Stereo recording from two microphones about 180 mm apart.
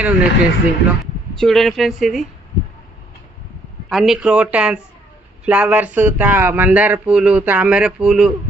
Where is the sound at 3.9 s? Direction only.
Centre (ahead or behind).